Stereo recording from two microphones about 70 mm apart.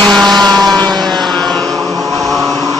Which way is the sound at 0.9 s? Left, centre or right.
Right.